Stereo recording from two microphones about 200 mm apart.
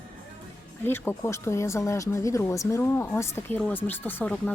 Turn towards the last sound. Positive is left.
turn(degrees=5)  # may be behind; listen again after turning